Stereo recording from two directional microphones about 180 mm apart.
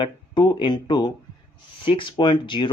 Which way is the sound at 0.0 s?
25° left (ahead or behind).